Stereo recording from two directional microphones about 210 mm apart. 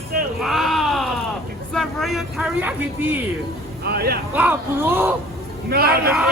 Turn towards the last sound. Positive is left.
turn(degrees=-45)  # may be behind; listen again after turning